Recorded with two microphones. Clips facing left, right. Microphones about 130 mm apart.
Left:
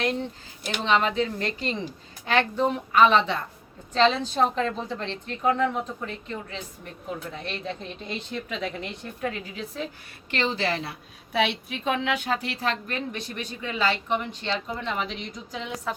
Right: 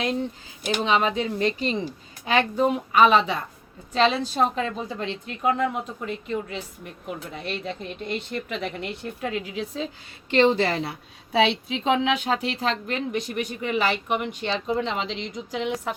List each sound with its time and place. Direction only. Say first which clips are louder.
0.8 s a woman's voice: even; 10° right (ahead or behind)